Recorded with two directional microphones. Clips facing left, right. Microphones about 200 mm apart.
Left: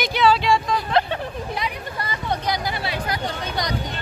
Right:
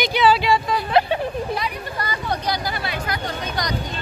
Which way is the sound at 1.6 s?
25° left (ahead or behind).